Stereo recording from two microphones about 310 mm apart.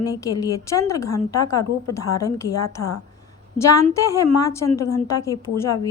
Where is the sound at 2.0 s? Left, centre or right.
Left.